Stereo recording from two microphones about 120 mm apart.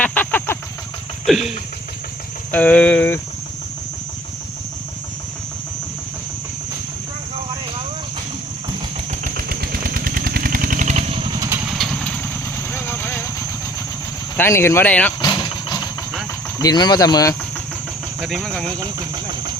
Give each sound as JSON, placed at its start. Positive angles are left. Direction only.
{"t": 0.0, "sound": "vehicle", "side_deg": 15}
{"t": 1.3, "sound": "speech", "side_deg": 0}
{"t": 2.5, "sound": "speech", "side_deg": 10}
{"t": 10.7, "sound": "vehicle", "side_deg": -80}
{"t": 11.6, "sound": "vehicle", "side_deg": 0}
{"t": 12.7, "sound": "vehicle", "side_deg": 15}
{"t": 14.3, "sound": "speech", "side_deg": 20}
{"t": 15.2, "sound": "vehicle", "side_deg": 35}
{"t": 16.6, "sound": "speech", "side_deg": 35}
{"t": 18.2, "sound": "speech", "side_deg": 0}
{"t": 18.8, "sound": "speech", "side_deg": -35}